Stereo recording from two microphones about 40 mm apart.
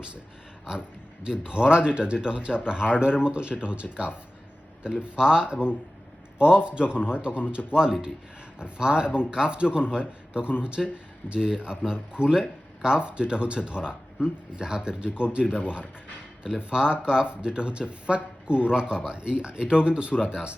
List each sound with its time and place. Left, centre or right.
0.7 s speech: right
6.7 s speech: right